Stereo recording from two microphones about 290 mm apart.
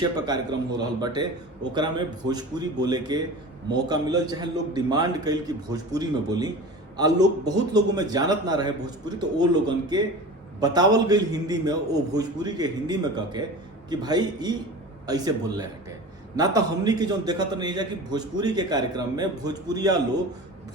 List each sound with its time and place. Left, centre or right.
0.0 s a man's voice: centre